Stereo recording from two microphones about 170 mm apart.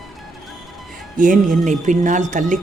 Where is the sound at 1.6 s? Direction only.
45° right (ahead or behind).